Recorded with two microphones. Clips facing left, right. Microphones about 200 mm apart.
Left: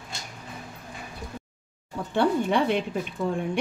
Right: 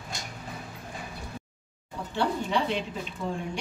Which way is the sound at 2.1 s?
55° left (ahead or behind).